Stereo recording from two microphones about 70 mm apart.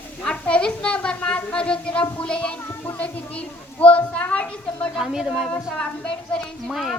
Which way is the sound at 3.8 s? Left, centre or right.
Centre.